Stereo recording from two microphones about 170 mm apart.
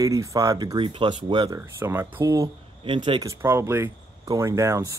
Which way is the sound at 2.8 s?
30° right (ahead or behind).